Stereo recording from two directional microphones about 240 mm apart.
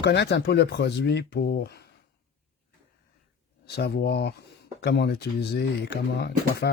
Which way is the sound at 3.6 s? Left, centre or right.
Left.